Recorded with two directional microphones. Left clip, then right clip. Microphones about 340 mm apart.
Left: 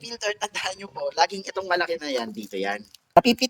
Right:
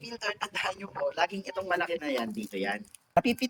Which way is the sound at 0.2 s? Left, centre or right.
Centre.